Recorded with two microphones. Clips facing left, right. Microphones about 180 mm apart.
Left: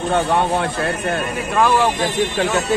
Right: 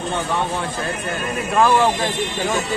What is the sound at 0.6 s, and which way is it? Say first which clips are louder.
Speech: left 4 dB; 70° left (ahead or behind).